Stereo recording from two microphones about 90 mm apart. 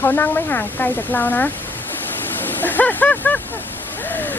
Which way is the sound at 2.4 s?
20° left (ahead or behind).